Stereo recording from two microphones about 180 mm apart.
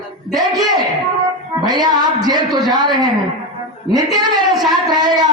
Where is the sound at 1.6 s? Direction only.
20° right (ahead or behind).